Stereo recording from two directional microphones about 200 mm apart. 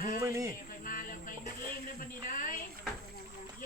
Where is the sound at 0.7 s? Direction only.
45° left (ahead or behind).